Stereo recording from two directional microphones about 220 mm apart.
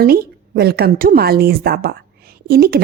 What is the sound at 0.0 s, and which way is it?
A woman's voice, 45° right (ahead or behind).